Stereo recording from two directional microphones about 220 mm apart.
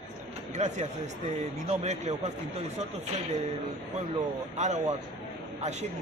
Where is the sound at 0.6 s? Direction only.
35° right (ahead or behind).